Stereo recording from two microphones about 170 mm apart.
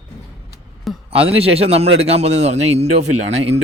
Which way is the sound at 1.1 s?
35° right (ahead or behind).